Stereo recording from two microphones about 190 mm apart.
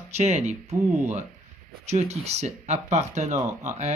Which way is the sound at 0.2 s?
35° right (ahead or behind).